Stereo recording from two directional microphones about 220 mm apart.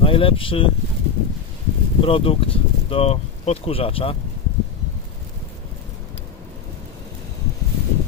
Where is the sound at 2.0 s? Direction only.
25° left (ahead or behind).